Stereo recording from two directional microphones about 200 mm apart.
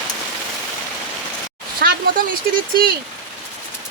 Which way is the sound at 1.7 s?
45° right (ahead or behind).